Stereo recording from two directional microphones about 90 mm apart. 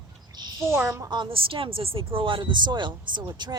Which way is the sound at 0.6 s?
30° right (ahead or behind).